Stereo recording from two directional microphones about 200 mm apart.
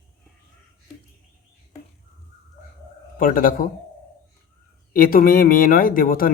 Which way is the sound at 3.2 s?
45° left (ahead or behind).